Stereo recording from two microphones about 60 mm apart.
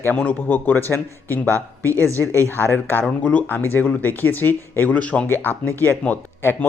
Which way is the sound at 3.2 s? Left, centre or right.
Left.